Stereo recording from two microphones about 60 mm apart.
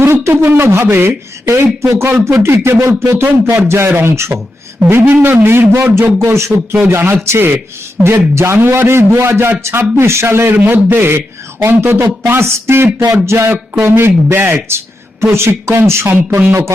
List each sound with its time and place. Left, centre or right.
0.0 s a man's voice: right
3.2 s speech: right
3.7 s a man's voice: right
4.9 s a man's voice: right
10.5 s speech: right
12.2 s a man's voice: right
13.5 s a man's voice: right